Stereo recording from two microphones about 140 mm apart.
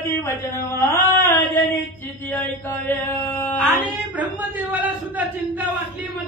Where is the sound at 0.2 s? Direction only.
20° left (ahead or behind).